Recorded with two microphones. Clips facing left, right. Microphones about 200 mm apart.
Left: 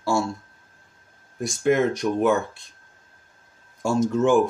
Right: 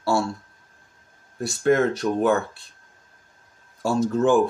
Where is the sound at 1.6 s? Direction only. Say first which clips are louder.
Right 1 dB; 15° left (ahead or behind).